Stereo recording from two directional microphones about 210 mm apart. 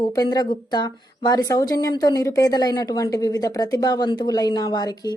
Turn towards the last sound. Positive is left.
turn(degrees=20)  # may be behind; listen again after turning